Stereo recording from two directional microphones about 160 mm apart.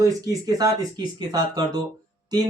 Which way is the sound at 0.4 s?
25° right (ahead or behind).